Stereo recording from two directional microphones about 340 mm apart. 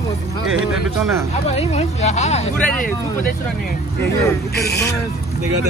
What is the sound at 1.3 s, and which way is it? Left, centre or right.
Speech, centre.